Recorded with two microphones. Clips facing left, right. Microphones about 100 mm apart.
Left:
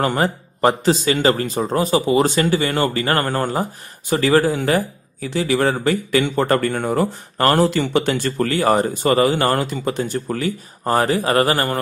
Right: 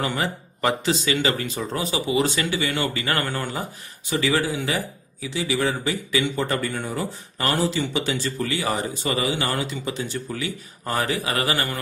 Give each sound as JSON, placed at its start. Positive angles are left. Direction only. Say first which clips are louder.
{"t": 0.0, "sound": "speech", "louder": "left 7 dB", "side_deg": 45}